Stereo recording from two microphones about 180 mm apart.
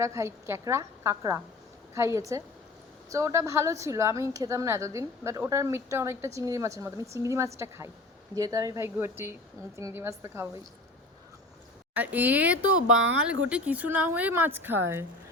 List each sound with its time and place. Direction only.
0.0 s a woman's voice: 15° right (ahead or behind)
11.9 s a woman's voice: 10° right (ahead or behind)